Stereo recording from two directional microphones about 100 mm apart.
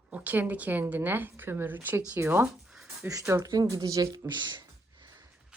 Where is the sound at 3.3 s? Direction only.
35° right (ahead or behind); by 5.2 s 50° right (ahead or behind).